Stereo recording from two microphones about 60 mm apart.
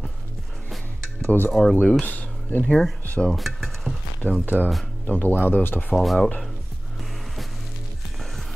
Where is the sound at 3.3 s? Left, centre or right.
Centre.